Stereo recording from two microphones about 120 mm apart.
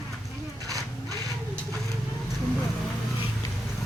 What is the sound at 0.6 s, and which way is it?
Vehicle, 30° right (ahead or behind).